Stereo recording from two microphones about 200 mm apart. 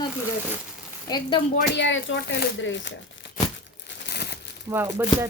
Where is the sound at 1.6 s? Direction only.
60° left (ahead or behind).